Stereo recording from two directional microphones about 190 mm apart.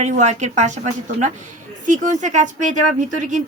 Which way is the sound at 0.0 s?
40° right (ahead or behind).